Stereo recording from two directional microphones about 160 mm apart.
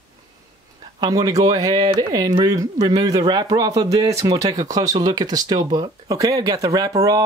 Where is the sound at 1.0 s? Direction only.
25° right (ahead or behind).